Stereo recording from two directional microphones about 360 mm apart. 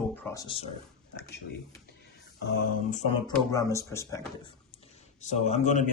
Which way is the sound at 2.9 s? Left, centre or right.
Centre.